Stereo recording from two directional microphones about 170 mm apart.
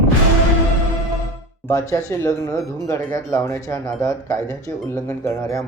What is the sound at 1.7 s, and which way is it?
Speech, 20° left (ahead or behind).